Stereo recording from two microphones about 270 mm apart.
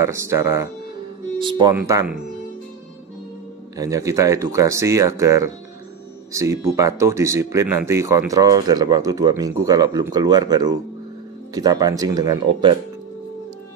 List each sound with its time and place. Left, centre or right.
0.0 s speech: centre
3.7 s speech: centre